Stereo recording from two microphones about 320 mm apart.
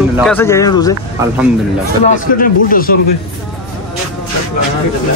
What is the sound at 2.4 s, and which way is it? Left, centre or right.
Speech, left.